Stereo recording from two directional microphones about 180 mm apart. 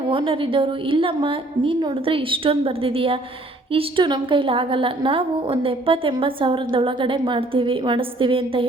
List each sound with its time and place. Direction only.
0.1 s a woman's voice: 30° right (ahead or behind)